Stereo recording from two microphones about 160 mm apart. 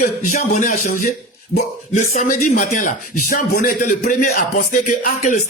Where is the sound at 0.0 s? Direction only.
50° left (ahead or behind).